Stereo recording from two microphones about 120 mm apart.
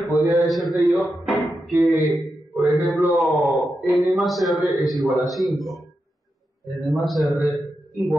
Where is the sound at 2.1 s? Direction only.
20° right (ahead or behind).